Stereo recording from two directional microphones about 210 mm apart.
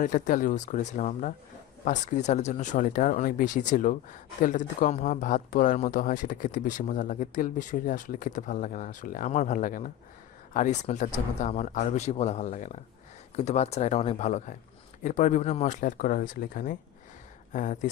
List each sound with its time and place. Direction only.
0.0 s speech: 40° left (ahead or behind)